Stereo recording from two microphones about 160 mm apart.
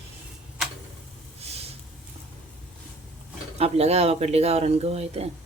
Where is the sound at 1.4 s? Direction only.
40° right (ahead or behind).